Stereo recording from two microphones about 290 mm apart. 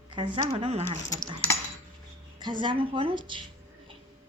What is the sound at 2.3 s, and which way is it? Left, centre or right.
Speech, centre.